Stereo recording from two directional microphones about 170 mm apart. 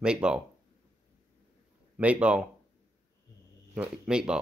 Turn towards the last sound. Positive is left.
turn(degrees=-5)  # may be behind; listen again after turning